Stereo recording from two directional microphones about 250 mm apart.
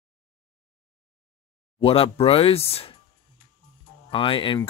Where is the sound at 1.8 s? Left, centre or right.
Left.